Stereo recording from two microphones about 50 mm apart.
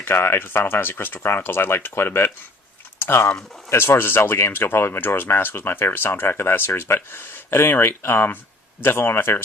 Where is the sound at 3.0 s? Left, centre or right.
Left.